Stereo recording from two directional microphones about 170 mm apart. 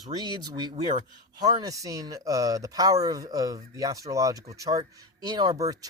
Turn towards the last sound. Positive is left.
turn(degrees=-20)  # may be behind; listen again after turning